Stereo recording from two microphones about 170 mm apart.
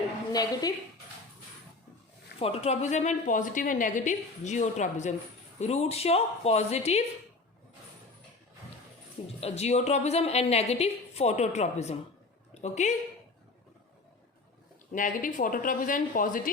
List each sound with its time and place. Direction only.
0.3 s a woman's voice: 20° left (ahead or behind)
2.4 s a woman's voice: 35° left (ahead or behind)
9.4 s a woman's voice: 40° left (ahead or behind)
14.9 s a woman's voice: 50° left (ahead or behind)